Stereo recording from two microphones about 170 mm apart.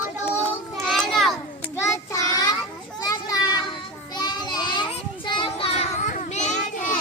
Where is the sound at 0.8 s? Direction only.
Centre (ahead or behind).